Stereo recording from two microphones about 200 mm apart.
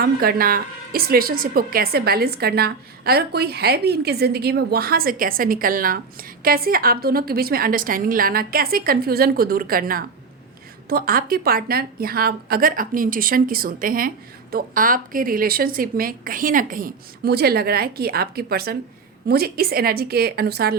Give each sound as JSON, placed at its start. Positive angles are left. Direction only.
{"t": 0.0, "sound": "a woman's voice", "side_deg": -50}